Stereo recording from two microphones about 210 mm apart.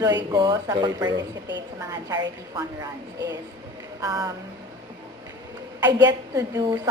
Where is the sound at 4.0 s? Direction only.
15° right (ahead or behind).